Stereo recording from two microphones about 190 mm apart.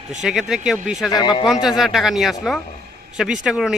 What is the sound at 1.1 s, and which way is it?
Speech, 20° left (ahead or behind).